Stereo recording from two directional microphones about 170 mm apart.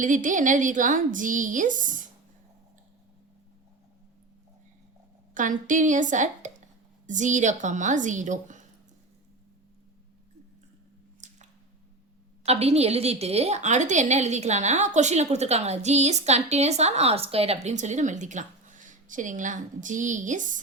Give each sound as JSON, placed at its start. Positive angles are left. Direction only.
{"t": 0.0, "sound": "a woman's voice", "side_deg": -50}
{"t": 5.3, "sound": "a woman's voice", "side_deg": -50}
{"t": 11.2, "sound": "squish", "side_deg": -45}
{"t": 12.5, "sound": "a woman's voice", "side_deg": -40}